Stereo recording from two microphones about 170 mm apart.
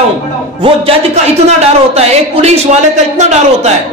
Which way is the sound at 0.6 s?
35° right (ahead or behind).